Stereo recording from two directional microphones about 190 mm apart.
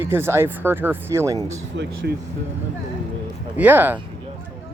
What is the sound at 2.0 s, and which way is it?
Speech, 60° right (ahead or behind).